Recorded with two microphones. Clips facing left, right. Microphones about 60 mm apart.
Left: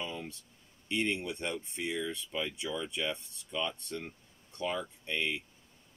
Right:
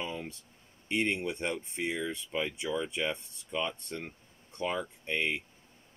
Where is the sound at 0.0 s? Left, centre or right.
Right.